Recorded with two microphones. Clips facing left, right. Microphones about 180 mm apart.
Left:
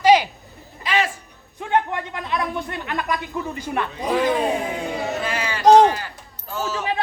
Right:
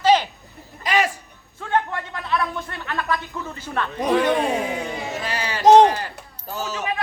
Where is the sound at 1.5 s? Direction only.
20° left (ahead or behind).